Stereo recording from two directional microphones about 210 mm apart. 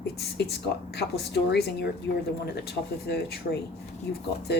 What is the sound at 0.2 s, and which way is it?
A woman's voice, 50° left (ahead or behind).